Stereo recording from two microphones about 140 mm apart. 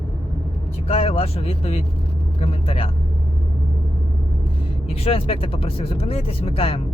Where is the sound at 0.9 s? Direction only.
45° left (ahead or behind).